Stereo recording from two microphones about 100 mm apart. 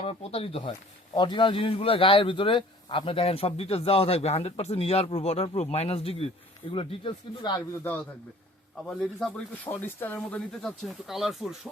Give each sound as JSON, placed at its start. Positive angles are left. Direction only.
{"t": 0.0, "sound": "speech", "side_deg": 80}
{"t": 1.1, "sound": "speech", "side_deg": 50}
{"t": 7.7, "sound": "speech", "side_deg": 20}
{"t": 8.9, "sound": "speech", "side_deg": 5}
{"t": 9.3, "sound": "speech", "side_deg": 20}